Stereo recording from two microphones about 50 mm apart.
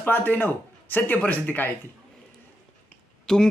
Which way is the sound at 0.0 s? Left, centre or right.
Left.